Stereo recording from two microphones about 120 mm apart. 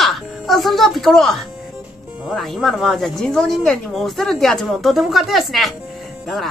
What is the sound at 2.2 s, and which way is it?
Speech, centre (ahead or behind).